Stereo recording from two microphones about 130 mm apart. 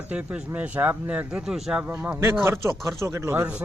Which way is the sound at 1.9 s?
20° right (ahead or behind).